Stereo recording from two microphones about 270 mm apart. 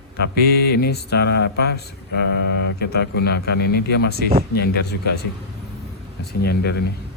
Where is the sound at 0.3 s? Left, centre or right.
Left.